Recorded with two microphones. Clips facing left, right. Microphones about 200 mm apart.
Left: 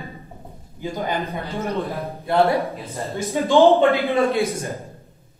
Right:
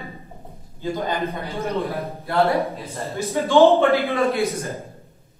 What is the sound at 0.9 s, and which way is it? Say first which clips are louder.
A man's voice: left 1 dB; 15° left (ahead or behind).